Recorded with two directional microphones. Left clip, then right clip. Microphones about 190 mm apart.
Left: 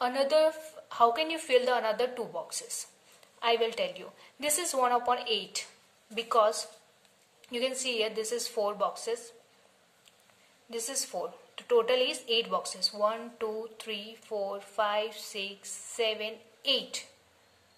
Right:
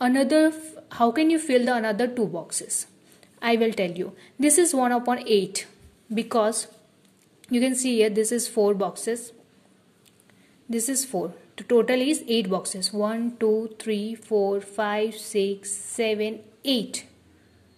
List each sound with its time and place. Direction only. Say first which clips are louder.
0.0 s a woman's voice: right 5 dB; 35° right (ahead or behind)
10.7 s a woman's voice: right 7 dB; 35° right (ahead or behind)